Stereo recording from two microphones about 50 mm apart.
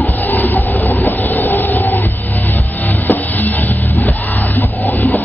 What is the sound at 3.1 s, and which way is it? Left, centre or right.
Music, left.